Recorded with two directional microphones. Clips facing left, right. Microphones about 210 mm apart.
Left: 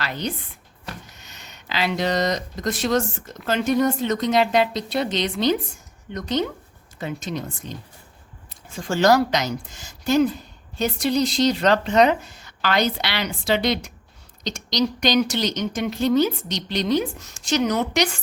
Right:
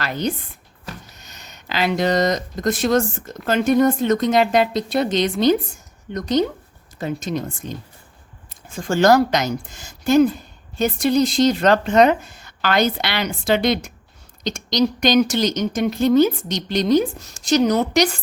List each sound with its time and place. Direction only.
0.0 s speech: 45° right (ahead or behind)